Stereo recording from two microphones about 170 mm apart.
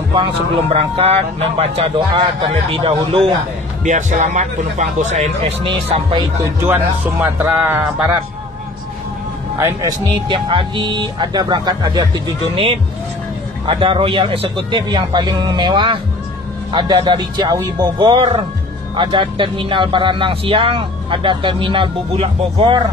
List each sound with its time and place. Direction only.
0.7 s speech: 35° right (ahead or behind)
3.8 s speech: 45° right (ahead or behind)
6.4 s speech: 15° right (ahead or behind)
9.6 s speech: 20° right (ahead or behind)